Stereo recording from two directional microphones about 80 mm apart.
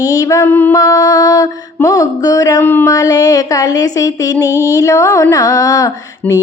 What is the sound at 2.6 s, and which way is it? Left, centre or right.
Speech, left.